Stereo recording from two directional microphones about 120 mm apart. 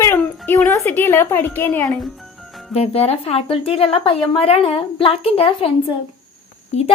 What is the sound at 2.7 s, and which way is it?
A woman's voice, 55° left (ahead or behind).